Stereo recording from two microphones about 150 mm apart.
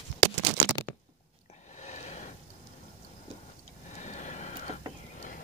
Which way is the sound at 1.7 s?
50° left (ahead or behind).